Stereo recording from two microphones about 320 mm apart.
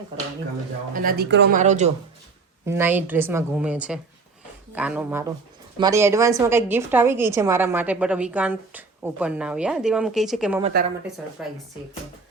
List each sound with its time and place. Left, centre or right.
0.9 s speech: right
2.6 s a woman's voice: centre